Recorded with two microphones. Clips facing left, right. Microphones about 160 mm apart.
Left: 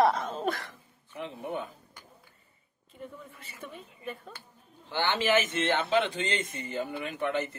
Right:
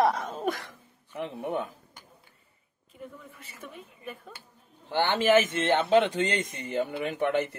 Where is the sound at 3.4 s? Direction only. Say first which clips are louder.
Even; 10° right (ahead or behind).